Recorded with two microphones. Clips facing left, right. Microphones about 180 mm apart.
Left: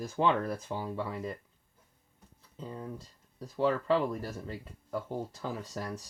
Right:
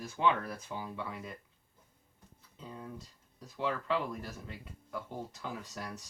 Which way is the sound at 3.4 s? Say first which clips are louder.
Left 7 dB; 35° left (ahead or behind).